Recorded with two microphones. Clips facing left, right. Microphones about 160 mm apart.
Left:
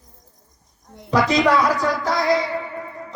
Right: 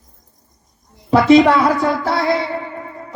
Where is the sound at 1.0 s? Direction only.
30° right (ahead or behind).